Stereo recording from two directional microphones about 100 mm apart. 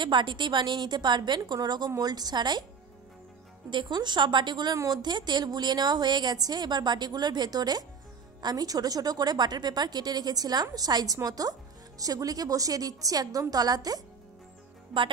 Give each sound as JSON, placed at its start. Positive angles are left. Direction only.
{"t": 0.0, "sound": "a woman's voice", "side_deg": -50}
{"t": 3.7, "sound": "a woman's voice", "side_deg": -45}
{"t": 14.9, "sound": "speech", "side_deg": 0}